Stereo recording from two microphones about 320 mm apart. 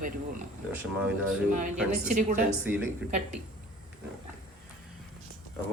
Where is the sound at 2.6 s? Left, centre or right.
Centre.